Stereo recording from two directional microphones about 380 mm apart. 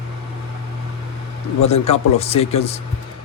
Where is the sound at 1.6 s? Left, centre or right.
Centre.